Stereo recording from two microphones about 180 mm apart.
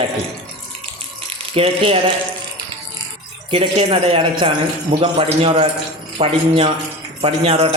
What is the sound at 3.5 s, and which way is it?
A man's voice, 30° right (ahead or behind).